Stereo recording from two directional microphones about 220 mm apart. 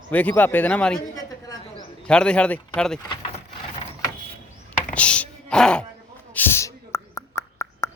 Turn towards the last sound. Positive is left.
turn(degrees=15)  # may be behind; listen again after turning